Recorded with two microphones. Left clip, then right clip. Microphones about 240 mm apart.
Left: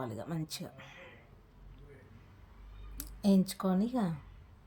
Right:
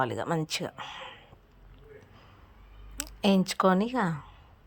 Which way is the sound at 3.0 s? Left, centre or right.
Centre.